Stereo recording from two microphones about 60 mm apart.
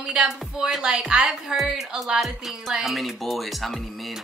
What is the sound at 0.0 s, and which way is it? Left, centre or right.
Speech, centre.